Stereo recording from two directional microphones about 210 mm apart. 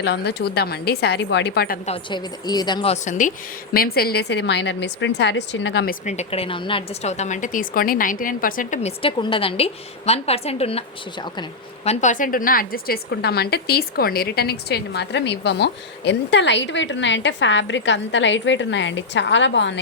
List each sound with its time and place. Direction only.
0.0 s a woman's voice: 55° left (ahead or behind)
1.9 s a woman's voice: 20° left (ahead or behind)
11.9 s a woman's voice: 35° left (ahead or behind); by 19.8 s 60° left (ahead or behind)